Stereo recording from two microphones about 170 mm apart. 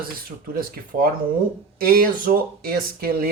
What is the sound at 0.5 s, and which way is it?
Speech, 60° right (ahead or behind).